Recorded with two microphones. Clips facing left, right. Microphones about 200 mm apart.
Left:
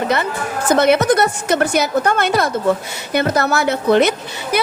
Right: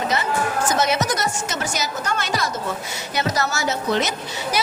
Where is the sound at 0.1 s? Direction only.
60° left (ahead or behind).